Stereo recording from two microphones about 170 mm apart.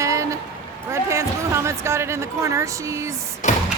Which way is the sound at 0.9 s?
15° right (ahead or behind).